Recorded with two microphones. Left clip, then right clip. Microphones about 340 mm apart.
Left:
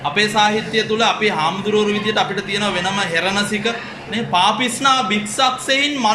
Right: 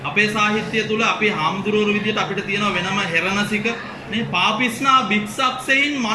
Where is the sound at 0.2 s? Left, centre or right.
Centre.